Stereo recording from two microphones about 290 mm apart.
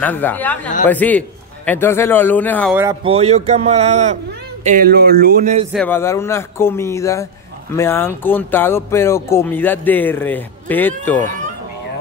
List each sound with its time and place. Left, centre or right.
0.0 s speech: centre
2.7 s speech: centre
5.7 s speech: centre